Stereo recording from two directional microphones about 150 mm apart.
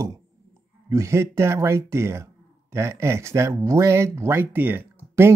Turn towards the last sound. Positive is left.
turn(degrees=-15)  # may be behind; listen again after turning